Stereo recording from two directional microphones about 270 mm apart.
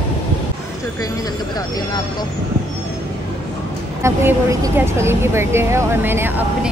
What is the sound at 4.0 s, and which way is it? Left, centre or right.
Speech, centre.